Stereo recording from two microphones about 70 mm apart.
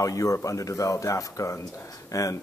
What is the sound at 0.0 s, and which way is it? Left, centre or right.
Speech, left.